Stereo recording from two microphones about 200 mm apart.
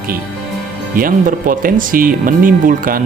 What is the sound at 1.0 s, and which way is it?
Speech, 45° right (ahead or behind).